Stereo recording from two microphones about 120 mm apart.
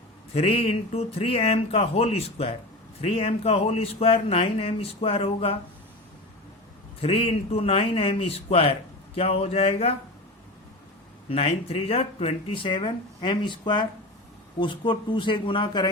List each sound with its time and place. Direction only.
0.3 s speech: 55° left (ahead or behind)
7.0 s speech: 55° left (ahead or behind)
11.3 s speech: 55° left (ahead or behind)